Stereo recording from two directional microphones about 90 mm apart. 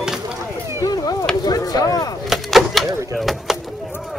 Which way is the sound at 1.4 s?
45° left (ahead or behind).